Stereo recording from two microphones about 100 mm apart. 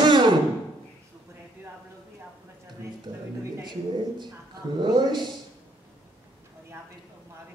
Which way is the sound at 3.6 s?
50° right (ahead or behind).